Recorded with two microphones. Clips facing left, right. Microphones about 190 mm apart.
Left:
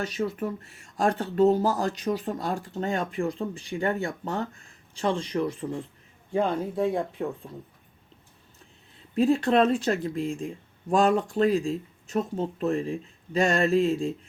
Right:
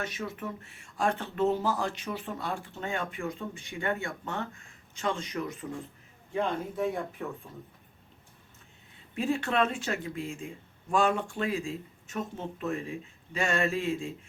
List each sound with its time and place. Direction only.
0.0 s speech: 35° left (ahead or behind)
9.1 s speech: 35° left (ahead or behind)